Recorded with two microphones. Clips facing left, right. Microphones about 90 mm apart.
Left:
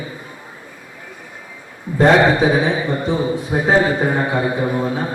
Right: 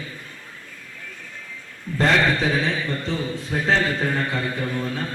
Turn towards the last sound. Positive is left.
turn(degrees=20)  # may be behind; listen again after turning